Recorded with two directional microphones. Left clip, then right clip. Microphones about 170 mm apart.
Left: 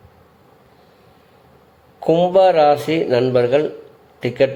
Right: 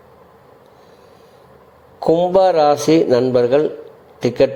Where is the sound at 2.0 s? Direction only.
15° right (ahead or behind).